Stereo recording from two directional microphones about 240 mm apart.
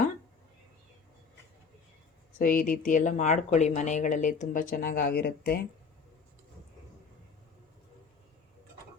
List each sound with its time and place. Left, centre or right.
2.4 s speech: left